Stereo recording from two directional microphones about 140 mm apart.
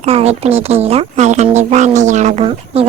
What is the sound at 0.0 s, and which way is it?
A woman's voice, 45° right (ahead or behind).